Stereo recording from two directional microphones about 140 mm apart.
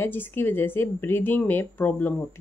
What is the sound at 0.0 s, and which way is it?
Speech, 15° left (ahead or behind).